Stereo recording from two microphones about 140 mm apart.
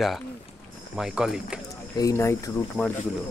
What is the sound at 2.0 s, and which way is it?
Speech, 20° left (ahead or behind).